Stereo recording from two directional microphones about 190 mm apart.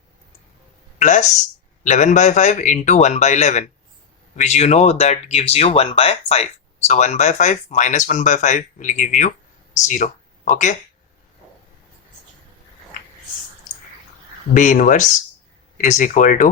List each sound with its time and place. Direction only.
0.9 s a sound: 40° left (ahead or behind)
1.8 s speech: 40° left (ahead or behind)
14.5 s speech: 40° left (ahead or behind)